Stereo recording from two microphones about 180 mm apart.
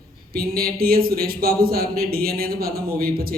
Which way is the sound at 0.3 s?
55° right (ahead or behind).